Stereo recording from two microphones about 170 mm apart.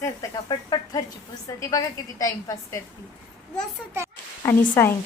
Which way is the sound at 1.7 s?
20° left (ahead or behind).